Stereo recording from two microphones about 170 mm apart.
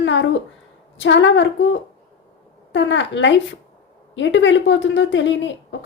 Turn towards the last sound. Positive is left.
turn(degrees=90)